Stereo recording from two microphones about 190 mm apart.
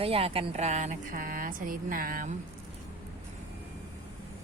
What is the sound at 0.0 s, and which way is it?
Speech, 30° right (ahead or behind).